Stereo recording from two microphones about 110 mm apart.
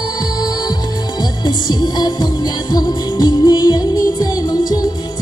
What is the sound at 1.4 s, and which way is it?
Music, 40° left (ahead or behind).